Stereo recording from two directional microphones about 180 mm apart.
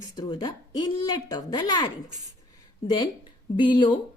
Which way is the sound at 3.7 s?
25° left (ahead or behind).